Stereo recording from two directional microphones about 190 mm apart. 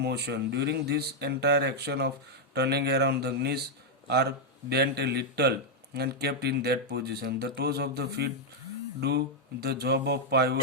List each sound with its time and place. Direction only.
0.0 s speech: 60° right (ahead or behind)